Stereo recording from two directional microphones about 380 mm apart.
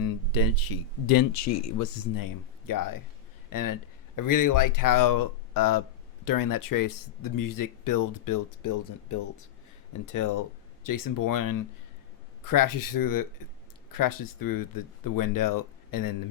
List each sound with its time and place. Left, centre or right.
0.0 s speech: left